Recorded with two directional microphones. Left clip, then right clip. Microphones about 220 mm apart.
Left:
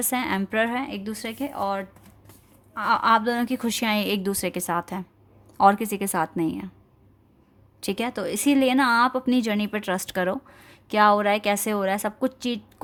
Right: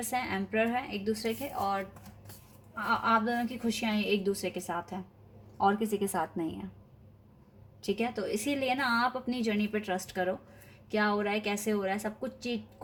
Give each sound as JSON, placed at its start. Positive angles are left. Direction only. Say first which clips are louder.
{"t": 0.1, "sound": "speech", "louder": "left 5 dB", "side_deg": 50}
{"t": 7.9, "sound": "speech", "louder": "left 5 dB", "side_deg": 50}